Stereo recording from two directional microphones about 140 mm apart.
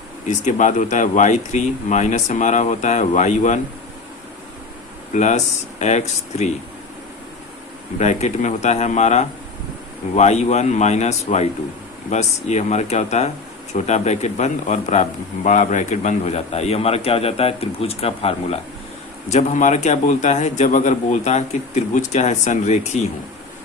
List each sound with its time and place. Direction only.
0.3 s a man's voice: 60° left (ahead or behind)
5.1 s a man's voice: 55° left (ahead or behind)
7.9 s a man's voice: 55° left (ahead or behind)